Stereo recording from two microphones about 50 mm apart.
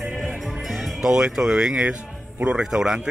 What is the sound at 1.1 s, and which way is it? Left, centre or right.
Speech, centre.